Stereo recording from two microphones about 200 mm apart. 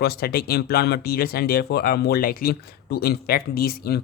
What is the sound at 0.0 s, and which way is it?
Speech, 50° left (ahead or behind).